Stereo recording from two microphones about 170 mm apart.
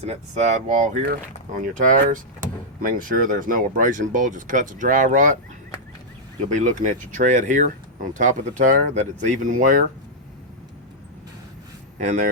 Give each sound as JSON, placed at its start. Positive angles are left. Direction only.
{"t": 0.0, "sound": "speech", "side_deg": -40}
{"t": 1.0, "sound": "speech", "side_deg": -55}
{"t": 6.4, "sound": "speech", "side_deg": -50}
{"t": 11.9, "sound": "speech", "side_deg": -50}